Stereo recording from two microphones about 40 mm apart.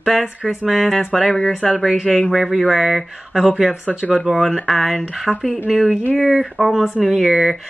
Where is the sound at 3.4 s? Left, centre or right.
Centre.